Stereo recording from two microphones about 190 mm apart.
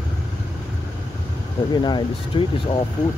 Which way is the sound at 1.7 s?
25° left (ahead or behind).